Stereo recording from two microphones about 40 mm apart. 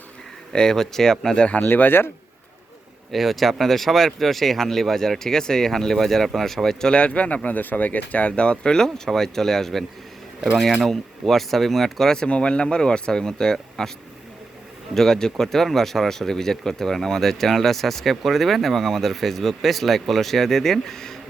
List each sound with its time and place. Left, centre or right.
0.5 s speech: centre
1.4 s speech: left
1.6 s speech: left
3.1 s speech: centre
6.9 s speech: left
8.3 s speech: left
9.0 s speech: centre
10.8 s speech: centre
14.9 s speech: centre